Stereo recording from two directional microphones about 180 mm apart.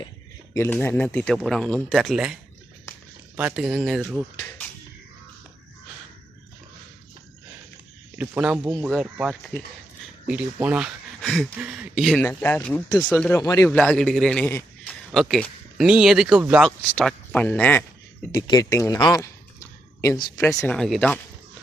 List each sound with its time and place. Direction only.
0.5 s speech: 10° left (ahead or behind)
4.4 s a sound: 10° left (ahead or behind)
8.2 s speech: 10° right (ahead or behind)
12.2 s a man's voice: 10° left (ahead or behind)
18.3 s a man's voice: 20° left (ahead or behind)
20.7 s speech: centre (ahead or behind)